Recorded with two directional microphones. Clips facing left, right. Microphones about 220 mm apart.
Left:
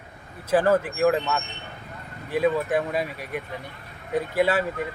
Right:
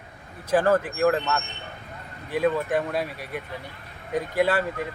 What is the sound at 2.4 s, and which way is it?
Speech, 5° left (ahead or behind).